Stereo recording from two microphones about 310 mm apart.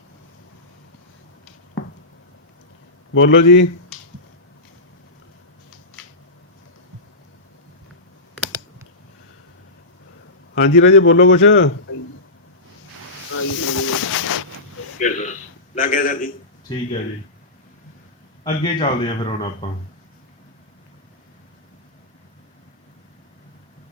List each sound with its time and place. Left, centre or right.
3.2 s a man's voice: left
10.5 s a man's voice: left
13.3 s snake: left
14.9 s a sound: left
16.7 s speech: centre
18.4 s speech: centre